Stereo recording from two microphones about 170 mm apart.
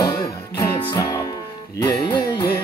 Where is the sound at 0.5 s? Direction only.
20° left (ahead or behind).